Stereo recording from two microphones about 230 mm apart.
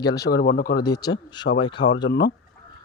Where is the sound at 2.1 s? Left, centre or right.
Left.